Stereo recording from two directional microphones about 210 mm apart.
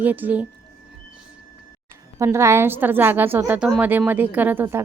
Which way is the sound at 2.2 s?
15° right (ahead or behind).